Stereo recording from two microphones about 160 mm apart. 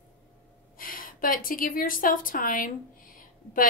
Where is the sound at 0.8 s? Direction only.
60° left (ahead or behind).